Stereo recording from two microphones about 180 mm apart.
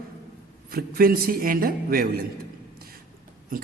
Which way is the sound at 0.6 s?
55° right (ahead or behind).